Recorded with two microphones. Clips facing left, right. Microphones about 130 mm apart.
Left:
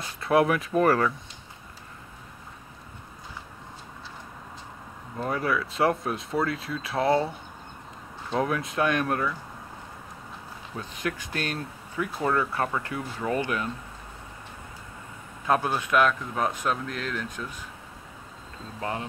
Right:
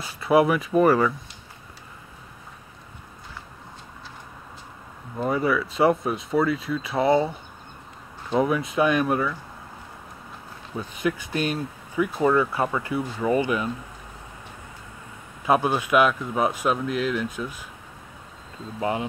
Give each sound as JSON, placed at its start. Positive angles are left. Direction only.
{"t": 0.0, "sound": "speech", "side_deg": -5}
{"t": 5.1, "sound": "speech", "side_deg": -5}
{"t": 10.8, "sound": "speech", "side_deg": -5}
{"t": 15.4, "sound": "speech", "side_deg": -10}
{"t": 18.8, "sound": "speech", "side_deg": -15}